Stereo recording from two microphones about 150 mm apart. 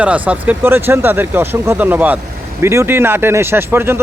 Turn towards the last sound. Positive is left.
turn(degrees=-15)  # may be behind; listen again after turning